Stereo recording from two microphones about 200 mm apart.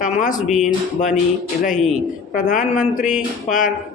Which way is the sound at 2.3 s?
40° left (ahead or behind).